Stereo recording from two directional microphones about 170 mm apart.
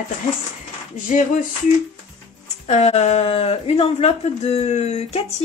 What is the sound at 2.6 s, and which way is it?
Speech, 40° left (ahead or behind).